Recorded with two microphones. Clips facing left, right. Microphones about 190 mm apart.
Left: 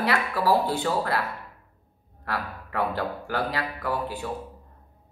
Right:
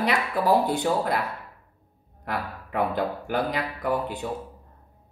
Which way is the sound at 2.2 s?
20° right (ahead or behind).